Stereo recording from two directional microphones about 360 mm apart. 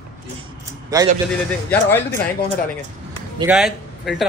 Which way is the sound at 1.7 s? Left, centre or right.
Centre.